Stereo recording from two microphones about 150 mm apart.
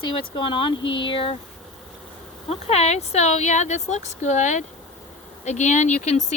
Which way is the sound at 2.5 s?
45° left (ahead or behind).